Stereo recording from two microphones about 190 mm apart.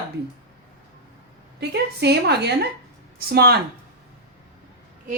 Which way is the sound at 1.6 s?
60° right (ahead or behind).